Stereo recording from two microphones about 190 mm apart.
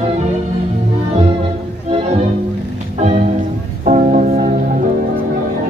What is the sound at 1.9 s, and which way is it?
Music, 30° right (ahead or behind).